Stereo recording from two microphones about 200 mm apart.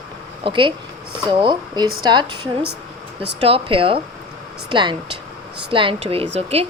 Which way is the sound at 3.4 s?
25° right (ahead or behind).